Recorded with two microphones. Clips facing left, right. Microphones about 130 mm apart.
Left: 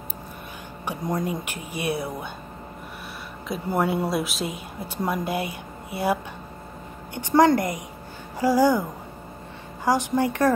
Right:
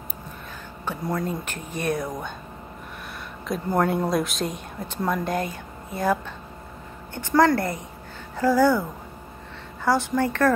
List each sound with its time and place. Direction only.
0.8 s speech: 15° left (ahead or behind)
3.4 s speech: 5° left (ahead or behind)
7.2 s speech: 20° left (ahead or behind)
9.8 s speech: 15° left (ahead or behind)